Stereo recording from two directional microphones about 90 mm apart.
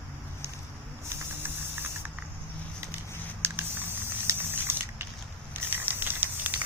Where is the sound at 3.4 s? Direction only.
25° right (ahead or behind).